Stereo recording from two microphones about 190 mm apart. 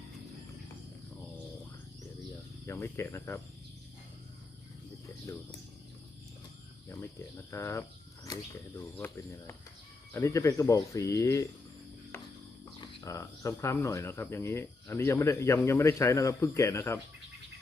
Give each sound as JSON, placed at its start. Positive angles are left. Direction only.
{"t": 2.6, "sound": "speech", "side_deg": 15}
{"t": 5.2, "sound": "speech", "side_deg": 20}
{"t": 6.9, "sound": "speech", "side_deg": 15}
{"t": 12.8, "sound": "speech", "side_deg": 15}